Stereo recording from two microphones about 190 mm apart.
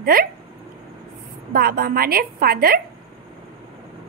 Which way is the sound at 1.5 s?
50° right (ahead or behind).